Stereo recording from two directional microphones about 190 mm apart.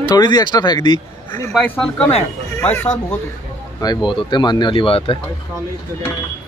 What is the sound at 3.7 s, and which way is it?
A man's voice, 20° left (ahead or behind).